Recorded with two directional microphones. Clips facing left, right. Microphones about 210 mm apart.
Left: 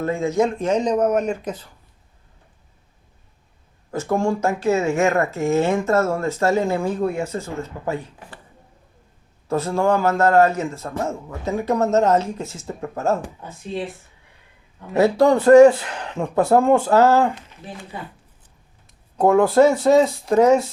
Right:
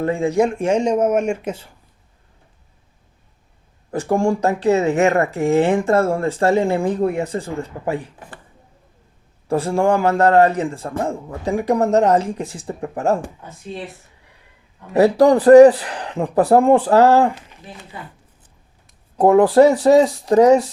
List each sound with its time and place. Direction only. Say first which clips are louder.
0.0 s speech: right 2 dB; 30° right (ahead or behind)
4.4 s speech: right 3 dB; 35° right (ahead or behind)
9.5 s speech: right 2 dB; 30° right (ahead or behind)
14.9 s speech: right 3 dB; 35° right (ahead or behind)
19.1 s speech: right 3 dB; 30° right (ahead or behind)